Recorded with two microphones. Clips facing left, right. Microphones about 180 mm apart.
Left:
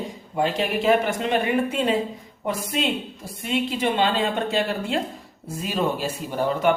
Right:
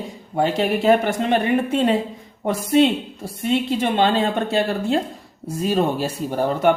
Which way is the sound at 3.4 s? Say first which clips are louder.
Right 4 dB; 45° right (ahead or behind).